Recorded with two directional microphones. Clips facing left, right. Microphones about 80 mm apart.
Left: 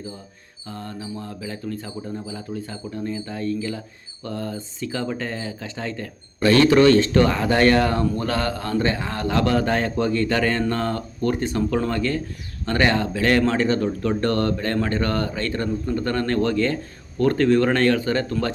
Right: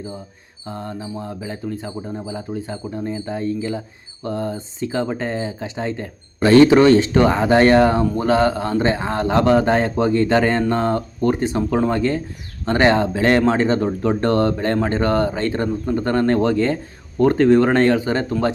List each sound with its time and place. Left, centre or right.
0.7 s speech: right